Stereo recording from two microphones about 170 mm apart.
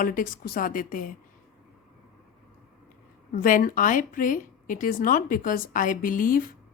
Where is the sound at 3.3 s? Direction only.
55° left (ahead or behind).